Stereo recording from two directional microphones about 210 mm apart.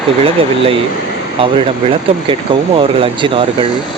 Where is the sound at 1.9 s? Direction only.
25° right (ahead or behind).